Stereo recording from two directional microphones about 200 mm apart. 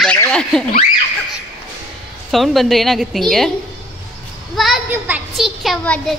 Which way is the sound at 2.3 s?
Centre (ahead or behind).